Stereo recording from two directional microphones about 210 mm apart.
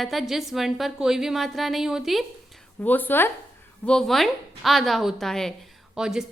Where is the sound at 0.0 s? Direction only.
Centre (ahead or behind).